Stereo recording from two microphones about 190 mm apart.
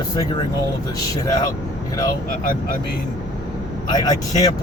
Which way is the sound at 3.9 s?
20° left (ahead or behind).